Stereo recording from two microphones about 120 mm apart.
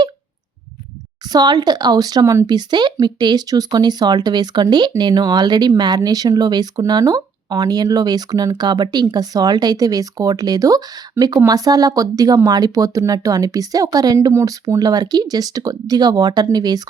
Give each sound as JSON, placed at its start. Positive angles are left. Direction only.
{"t": 1.3, "sound": "speech", "side_deg": -35}